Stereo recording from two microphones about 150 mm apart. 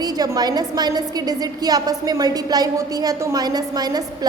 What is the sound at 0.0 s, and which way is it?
A woman's voice, 25° right (ahead or behind).